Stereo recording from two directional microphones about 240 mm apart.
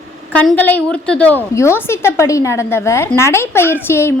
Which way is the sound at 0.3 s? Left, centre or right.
Centre.